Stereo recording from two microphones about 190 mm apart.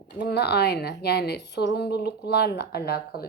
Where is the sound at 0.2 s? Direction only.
60° left (ahead or behind).